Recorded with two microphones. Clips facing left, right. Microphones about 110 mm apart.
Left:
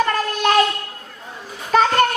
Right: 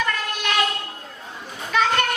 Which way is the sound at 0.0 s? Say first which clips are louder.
Left 7 dB; 40° left (ahead or behind).